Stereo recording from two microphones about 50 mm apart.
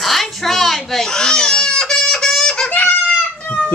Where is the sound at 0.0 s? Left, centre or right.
Centre.